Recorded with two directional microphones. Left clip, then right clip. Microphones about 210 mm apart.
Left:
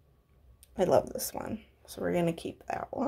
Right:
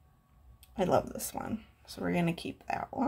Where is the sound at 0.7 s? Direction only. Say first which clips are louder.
Left 3 dB; 20° left (ahead or behind).